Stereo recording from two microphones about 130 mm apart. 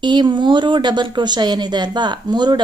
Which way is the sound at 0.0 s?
35° right (ahead or behind).